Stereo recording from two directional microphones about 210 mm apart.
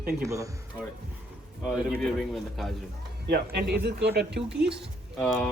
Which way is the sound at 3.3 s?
45° right (ahead or behind).